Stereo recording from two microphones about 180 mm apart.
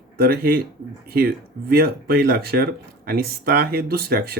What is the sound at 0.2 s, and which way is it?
Speech, 55° right (ahead or behind).